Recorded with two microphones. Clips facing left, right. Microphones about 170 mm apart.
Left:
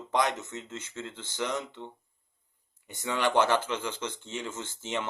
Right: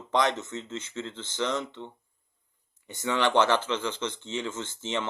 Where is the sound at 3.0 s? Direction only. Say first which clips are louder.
Right 2 dB; 70° right (ahead or behind).